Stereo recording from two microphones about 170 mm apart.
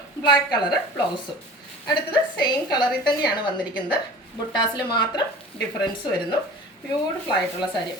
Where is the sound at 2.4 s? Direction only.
25° left (ahead or behind).